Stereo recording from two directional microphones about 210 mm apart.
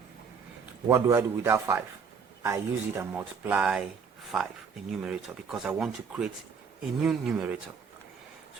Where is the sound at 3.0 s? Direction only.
10° right (ahead or behind).